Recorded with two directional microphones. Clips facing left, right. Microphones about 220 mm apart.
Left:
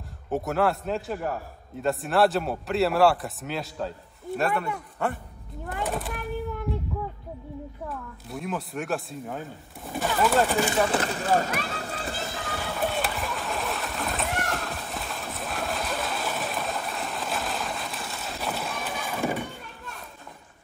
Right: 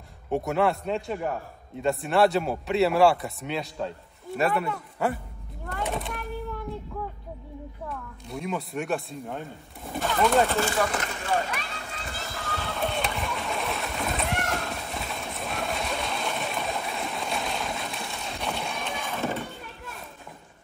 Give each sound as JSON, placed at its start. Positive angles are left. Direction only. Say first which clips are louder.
{"t": 0.3, "sound": "a man's voice", "louder": "right 1 dB", "side_deg": 0}
{"t": 7.9, "sound": "a man's voice", "louder": "even", "side_deg": 0}
{"t": 10.5, "sound": "speech", "louder": "left 1 dB", "side_deg": 15}
{"t": 10.9, "sound": "children playing", "louder": "left 4 dB", "side_deg": 35}